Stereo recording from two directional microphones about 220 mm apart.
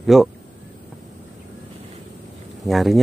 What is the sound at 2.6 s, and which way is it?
Speech, centre (ahead or behind).